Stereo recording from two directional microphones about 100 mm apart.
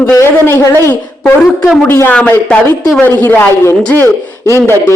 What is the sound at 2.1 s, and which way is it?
Speech, 15° left (ahead or behind).